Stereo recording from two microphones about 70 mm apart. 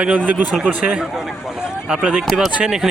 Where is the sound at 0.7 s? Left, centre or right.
Right.